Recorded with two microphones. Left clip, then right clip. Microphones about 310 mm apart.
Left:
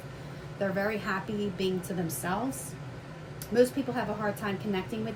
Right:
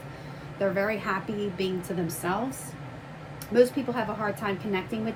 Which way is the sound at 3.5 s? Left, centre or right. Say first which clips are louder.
Right 3 dB; right.